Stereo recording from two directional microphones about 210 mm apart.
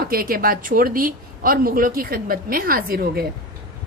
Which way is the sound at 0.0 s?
45° right (ahead or behind).